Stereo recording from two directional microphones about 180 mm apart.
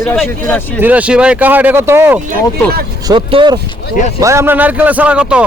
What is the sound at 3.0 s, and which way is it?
Speech, 25° right (ahead or behind).